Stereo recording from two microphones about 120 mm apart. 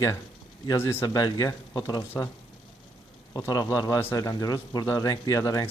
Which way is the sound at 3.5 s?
30° left (ahead or behind).